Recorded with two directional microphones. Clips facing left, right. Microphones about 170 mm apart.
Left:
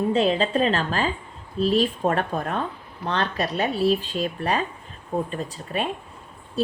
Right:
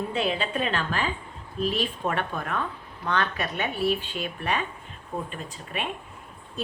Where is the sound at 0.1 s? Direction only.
35° left (ahead or behind).